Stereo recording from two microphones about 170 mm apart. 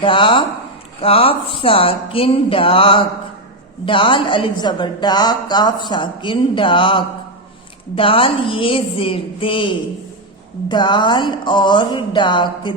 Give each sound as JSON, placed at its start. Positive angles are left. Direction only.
{"t": 0.0, "sound": "a woman's voice", "side_deg": 30}